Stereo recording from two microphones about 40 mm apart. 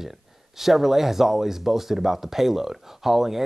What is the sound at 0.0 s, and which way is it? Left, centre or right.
Speech, centre.